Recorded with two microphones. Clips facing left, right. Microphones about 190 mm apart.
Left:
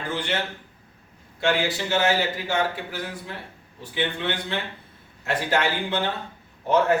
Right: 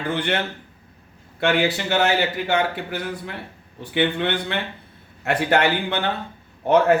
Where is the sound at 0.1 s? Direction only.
60° right (ahead or behind).